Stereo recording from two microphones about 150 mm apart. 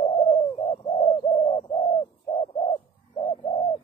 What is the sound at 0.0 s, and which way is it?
Bird, 35° left (ahead or behind).